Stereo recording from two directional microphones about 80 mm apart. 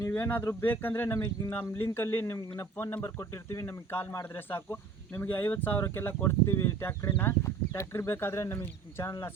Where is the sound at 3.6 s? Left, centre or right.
Left.